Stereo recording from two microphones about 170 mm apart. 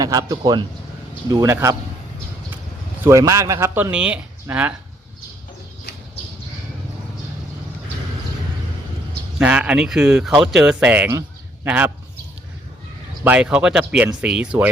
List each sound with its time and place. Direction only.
0.0 s a man's voice: 20° right (ahead or behind)
3.0 s speech: 15° right (ahead or behind)
9.4 s speech: 5° right (ahead or behind)
13.2 s speech: 5° right (ahead or behind)